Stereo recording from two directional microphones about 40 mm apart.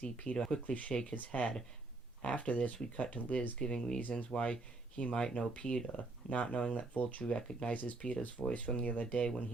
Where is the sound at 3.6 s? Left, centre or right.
Centre.